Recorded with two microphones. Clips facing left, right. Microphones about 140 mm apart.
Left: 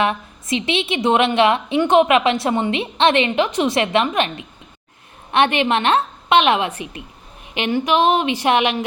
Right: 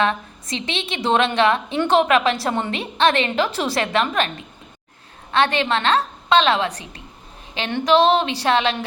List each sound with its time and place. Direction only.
0.0 s a woman's voice: 20° left (ahead or behind)
5.3 s a woman's voice: 20° left (ahead or behind)